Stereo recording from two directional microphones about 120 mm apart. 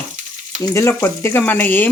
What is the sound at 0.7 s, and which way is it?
Speech, 20° left (ahead or behind).